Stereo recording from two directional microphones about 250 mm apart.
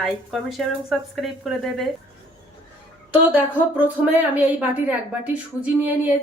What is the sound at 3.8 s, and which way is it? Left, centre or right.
A woman's voice, centre.